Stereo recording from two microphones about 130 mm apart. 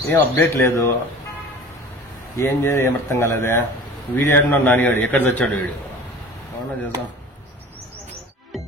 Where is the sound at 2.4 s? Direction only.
20° left (ahead or behind).